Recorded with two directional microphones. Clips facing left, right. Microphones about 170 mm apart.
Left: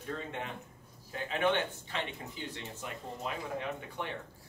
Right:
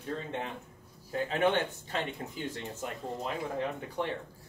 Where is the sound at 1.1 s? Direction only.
40° right (ahead or behind).